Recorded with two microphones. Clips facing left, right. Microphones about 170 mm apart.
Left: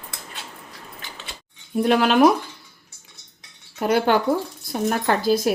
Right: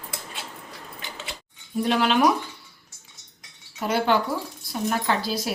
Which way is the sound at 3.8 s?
50° left (ahead or behind).